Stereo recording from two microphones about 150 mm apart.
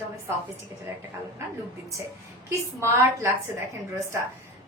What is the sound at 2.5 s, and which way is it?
Speech, 15° right (ahead or behind).